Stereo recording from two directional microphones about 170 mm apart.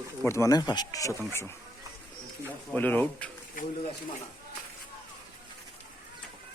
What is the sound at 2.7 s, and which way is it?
Speech, 10° left (ahead or behind).